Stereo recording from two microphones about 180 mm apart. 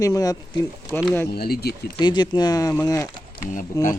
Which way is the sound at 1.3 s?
60° left (ahead or behind).